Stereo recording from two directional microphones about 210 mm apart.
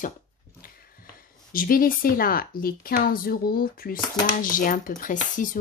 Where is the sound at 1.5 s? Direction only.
40° left (ahead or behind).